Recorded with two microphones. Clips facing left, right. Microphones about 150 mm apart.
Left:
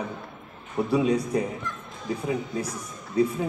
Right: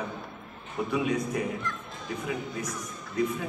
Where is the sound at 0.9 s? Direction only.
35° left (ahead or behind).